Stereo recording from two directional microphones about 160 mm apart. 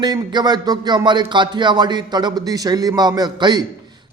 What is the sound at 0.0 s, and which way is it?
A man's voice, 25° right (ahead or behind).